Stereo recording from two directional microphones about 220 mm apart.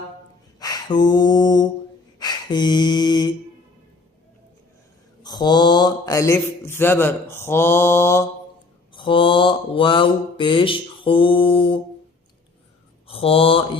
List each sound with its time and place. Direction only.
0.6 s a sound: 20° left (ahead or behind)
5.2 s mantra: 20° left (ahead or behind)
8.9 s mantra: 20° left (ahead or behind)
13.1 s speech: 25° left (ahead or behind)